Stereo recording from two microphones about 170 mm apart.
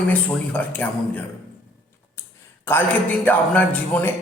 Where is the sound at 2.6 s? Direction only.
10° left (ahead or behind).